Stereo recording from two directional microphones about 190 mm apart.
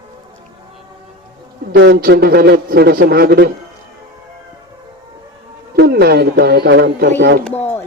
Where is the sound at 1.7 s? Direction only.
65° right (ahead or behind).